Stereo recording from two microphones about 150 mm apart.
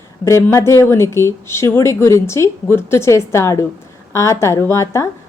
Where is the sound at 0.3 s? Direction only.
20° left (ahead or behind).